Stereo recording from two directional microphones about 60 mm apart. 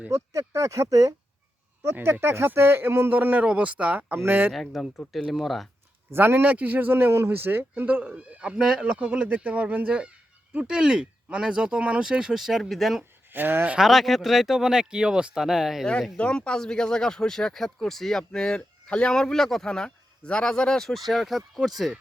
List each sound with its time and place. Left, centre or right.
0.1 s speech: right
1.8 s speech: right
3.4 s speech: right
4.1 s speech: right
4.7 s speech: centre
6.1 s speech: right
6.4 s speech: right
8.0 s speech: centre
13.3 s speech: right
13.7 s speech: centre
16.1 s speech: centre